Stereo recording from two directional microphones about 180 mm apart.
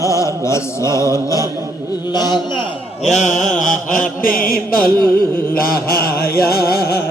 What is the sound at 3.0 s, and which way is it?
Mantra, 40° left (ahead or behind).